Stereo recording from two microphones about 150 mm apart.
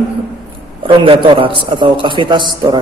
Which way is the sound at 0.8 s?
35° right (ahead or behind).